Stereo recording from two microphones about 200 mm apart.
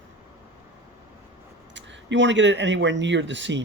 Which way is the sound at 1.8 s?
65° right (ahead or behind).